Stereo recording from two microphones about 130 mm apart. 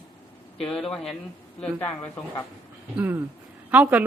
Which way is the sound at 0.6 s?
5° left (ahead or behind).